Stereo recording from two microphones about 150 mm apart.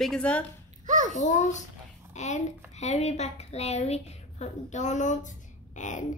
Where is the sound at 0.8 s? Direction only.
55° right (ahead or behind).